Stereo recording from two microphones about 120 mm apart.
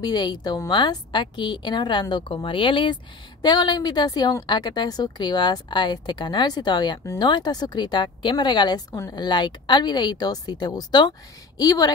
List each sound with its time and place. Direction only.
0.0 s a woman's voice: 35° left (ahead or behind)
9.2 s a woman's voice: 40° left (ahead or behind)